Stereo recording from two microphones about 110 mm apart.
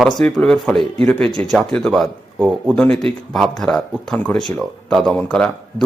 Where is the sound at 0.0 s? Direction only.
Centre (ahead or behind).